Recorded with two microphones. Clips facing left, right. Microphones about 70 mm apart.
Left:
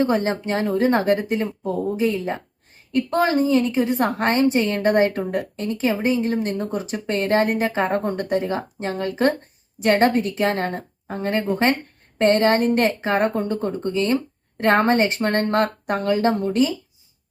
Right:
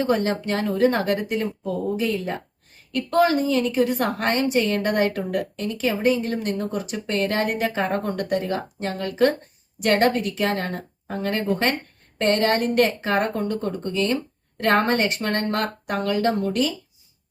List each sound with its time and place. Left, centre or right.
0.0 s a woman's voice: left